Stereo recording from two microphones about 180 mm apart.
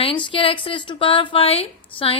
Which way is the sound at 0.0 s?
30° left (ahead or behind).